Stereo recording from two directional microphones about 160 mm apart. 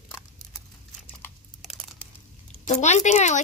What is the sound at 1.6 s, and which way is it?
Computer keyboard, centre (ahead or behind).